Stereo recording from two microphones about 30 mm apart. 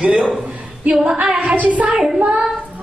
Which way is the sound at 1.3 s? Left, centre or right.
Right.